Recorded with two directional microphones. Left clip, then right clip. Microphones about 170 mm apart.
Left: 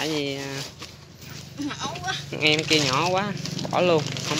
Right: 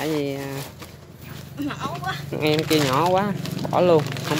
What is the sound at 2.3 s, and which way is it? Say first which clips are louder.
Speech: even; 15° right (ahead or behind).